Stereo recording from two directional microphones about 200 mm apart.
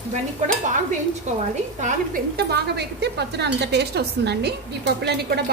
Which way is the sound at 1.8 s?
45° right (ahead or behind).